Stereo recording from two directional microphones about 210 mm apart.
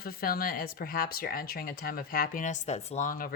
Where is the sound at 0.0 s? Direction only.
45° left (ahead or behind).